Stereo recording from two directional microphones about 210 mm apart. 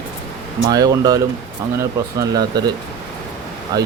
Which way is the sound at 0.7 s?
20° right (ahead or behind).